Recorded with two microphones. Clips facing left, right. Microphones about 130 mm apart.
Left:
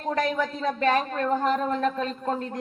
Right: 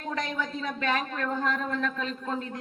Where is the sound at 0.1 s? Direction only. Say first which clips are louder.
Left 6 dB; 40° left (ahead or behind).